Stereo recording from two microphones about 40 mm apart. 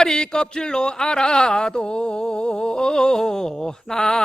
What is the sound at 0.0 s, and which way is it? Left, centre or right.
Speech, centre.